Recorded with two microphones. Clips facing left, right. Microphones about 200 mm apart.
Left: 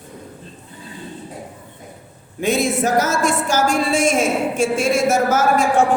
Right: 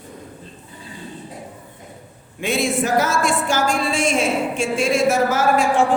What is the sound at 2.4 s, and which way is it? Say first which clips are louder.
A woman's voice: left 2 dB; 40° left (ahead or behind).